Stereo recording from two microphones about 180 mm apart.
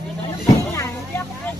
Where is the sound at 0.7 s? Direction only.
15° left (ahead or behind).